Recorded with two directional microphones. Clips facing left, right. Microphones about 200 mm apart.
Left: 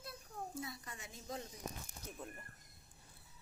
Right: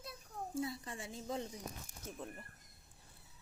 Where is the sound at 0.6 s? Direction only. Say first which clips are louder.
Right 7 dB; 30° right (ahead or behind).